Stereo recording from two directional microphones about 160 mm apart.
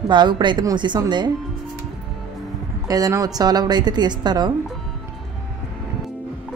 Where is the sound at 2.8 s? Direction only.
20° right (ahead or behind).